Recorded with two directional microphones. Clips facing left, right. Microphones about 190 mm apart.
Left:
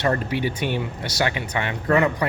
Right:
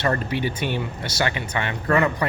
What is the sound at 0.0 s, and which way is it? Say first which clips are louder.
Speech: left 1 dB; 15° left (ahead or behind).